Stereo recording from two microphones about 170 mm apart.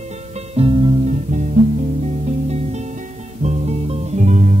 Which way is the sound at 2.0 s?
40° right (ahead or behind).